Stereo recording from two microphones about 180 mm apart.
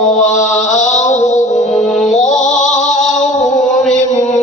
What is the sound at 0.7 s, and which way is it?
Mantra, 40° left (ahead or behind).